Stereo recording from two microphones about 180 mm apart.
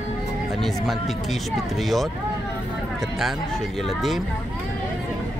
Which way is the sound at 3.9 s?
Centre (ahead or behind).